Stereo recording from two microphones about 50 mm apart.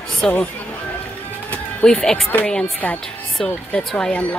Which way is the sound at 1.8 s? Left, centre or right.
Centre.